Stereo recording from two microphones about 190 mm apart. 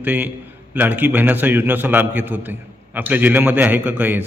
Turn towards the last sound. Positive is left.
turn(degrees=-10)  # may be behind; listen again after turning